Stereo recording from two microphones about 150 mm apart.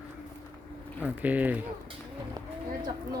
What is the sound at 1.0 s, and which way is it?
Speech, 10° right (ahead or behind).